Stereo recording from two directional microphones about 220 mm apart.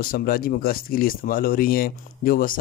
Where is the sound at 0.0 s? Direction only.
40° left (ahead or behind).